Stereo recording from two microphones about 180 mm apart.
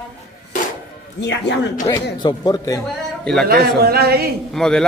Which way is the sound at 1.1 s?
75° left (ahead or behind).